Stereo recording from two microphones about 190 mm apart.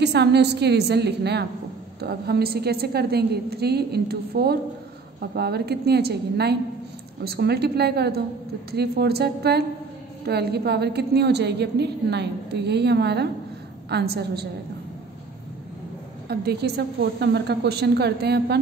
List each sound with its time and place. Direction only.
0.0 s a woman's voice: 60° right (ahead or behind)
16.3 s a woman's voice: 60° right (ahead or behind)